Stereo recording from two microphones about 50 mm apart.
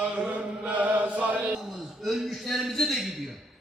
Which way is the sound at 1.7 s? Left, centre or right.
Centre.